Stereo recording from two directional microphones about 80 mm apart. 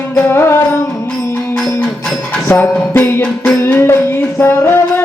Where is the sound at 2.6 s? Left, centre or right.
Left.